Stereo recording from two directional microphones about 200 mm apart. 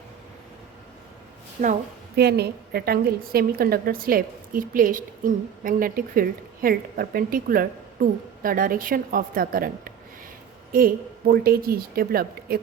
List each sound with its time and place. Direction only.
1.6 s a woman's voice: 40° right (ahead or behind)
2.1 s a woman's voice: 55° right (ahead or behind)